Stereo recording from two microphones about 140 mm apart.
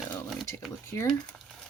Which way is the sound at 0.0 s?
Centre (ahead or behind).